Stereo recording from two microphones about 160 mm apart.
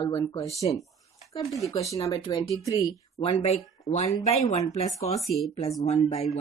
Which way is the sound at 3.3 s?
40° left (ahead or behind).